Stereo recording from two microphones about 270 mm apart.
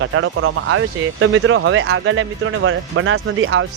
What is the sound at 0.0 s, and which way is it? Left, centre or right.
Speech, right.